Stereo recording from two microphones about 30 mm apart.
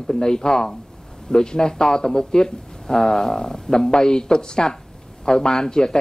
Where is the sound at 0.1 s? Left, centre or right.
Left.